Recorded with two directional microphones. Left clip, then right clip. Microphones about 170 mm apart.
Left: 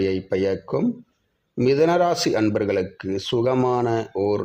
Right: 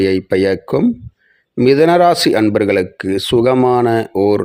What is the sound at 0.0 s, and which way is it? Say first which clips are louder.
Speech: right 8 dB; 35° right (ahead or behind).